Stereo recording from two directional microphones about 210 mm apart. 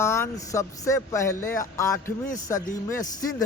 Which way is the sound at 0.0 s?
15° left (ahead or behind).